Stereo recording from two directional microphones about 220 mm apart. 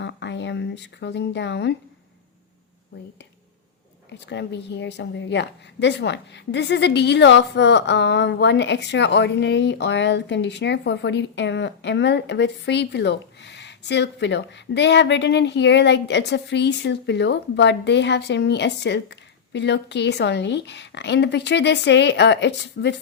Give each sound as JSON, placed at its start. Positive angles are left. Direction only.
{"t": 0.0, "sound": "speech", "side_deg": 55}
{"t": 4.3, "sound": "a woman's voice", "side_deg": 50}